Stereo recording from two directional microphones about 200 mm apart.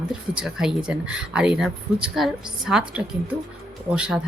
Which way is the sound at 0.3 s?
Centre (ahead or behind).